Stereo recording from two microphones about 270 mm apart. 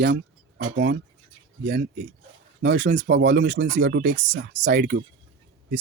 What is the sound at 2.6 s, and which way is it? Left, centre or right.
Speech, right.